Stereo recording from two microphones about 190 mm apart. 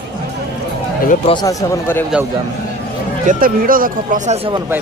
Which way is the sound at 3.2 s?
45° right (ahead or behind).